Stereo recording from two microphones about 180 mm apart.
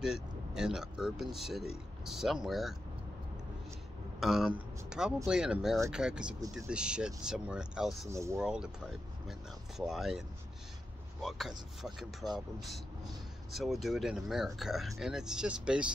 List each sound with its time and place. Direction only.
0.0 s speech: 5° right (ahead or behind)
4.2 s speech: centre (ahead or behind)
8.1 s speech: 15° right (ahead or behind)
8.4 s speech: 5° right (ahead or behind)
9.8 s speech: centre (ahead or behind)
13.5 s speech: centre (ahead or behind)